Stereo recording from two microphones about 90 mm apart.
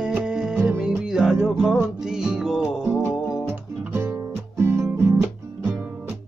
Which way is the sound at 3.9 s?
30° right (ahead or behind).